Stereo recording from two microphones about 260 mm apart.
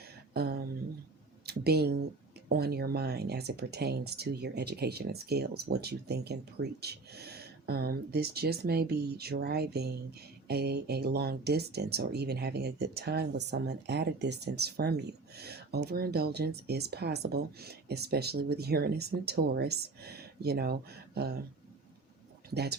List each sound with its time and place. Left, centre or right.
0.3 s a sound: right
2.5 s speech: right
22.4 s speech: right